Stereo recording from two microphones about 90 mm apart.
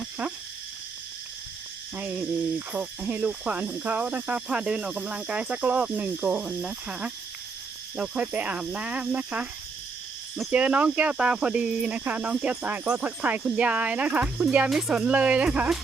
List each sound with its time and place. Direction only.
2.0 s cricket: 20° right (ahead or behind)
10.5 s cricket: 15° right (ahead or behind)